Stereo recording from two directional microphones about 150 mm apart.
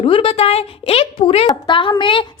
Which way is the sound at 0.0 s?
40° left (ahead or behind).